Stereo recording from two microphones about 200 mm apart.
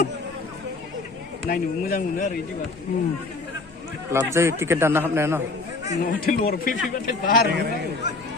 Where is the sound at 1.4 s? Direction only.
45° left (ahead or behind).